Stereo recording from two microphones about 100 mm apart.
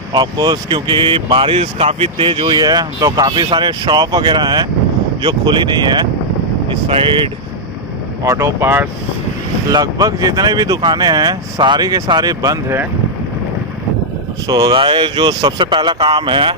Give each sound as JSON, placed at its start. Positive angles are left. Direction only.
{"t": 0.1, "sound": "speech", "side_deg": -45}
{"t": 6.7, "sound": "speech", "side_deg": -60}
{"t": 8.2, "sound": "speech", "side_deg": -30}
{"t": 9.7, "sound": "speech", "side_deg": -40}
{"t": 12.4, "sound": "speech", "side_deg": -30}
{"t": 14.5, "sound": "speech", "side_deg": -45}